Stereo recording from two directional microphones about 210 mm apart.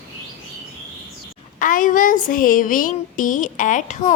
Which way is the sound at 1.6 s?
40° left (ahead or behind).